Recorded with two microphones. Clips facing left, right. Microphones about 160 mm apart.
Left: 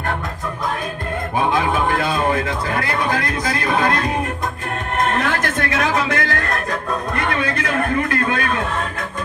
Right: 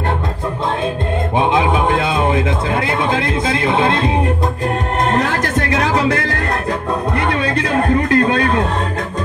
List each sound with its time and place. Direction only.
1.4 s music: 20° right (ahead or behind)
5.1 s music: 35° right (ahead or behind)
7.2 s a sound: 30° right (ahead or behind)